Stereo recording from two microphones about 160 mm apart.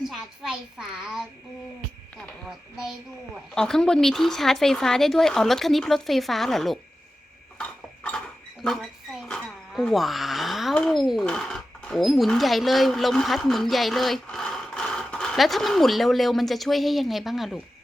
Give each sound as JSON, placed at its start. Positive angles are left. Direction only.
{"t": 0.1, "sound": "speech", "side_deg": -5}
{"t": 2.5, "sound": "speech", "side_deg": -5}
{"t": 7.6, "sound": "a sound", "side_deg": 5}
{"t": 8.6, "sound": "speech", "side_deg": 0}